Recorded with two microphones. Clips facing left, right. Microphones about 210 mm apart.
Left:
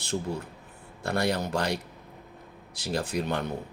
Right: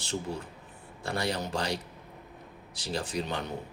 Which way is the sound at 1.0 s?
60° left (ahead or behind).